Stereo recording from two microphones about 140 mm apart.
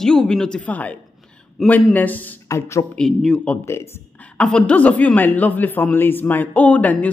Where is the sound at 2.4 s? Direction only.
25° left (ahead or behind).